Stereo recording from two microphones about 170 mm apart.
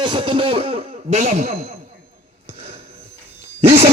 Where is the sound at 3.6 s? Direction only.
35° right (ahead or behind).